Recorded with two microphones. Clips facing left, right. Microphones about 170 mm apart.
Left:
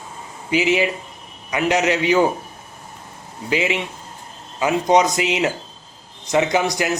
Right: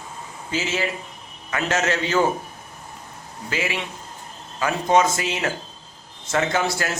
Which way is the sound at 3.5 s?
20° left (ahead or behind).